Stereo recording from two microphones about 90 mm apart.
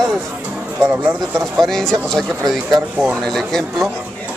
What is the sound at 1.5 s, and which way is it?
Speech, 5° left (ahead or behind).